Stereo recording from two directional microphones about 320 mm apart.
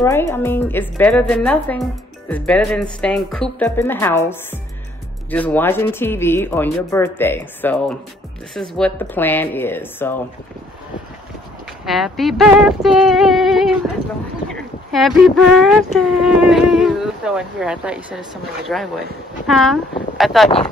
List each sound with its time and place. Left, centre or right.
0.0 s speech: centre
11.8 s speech: centre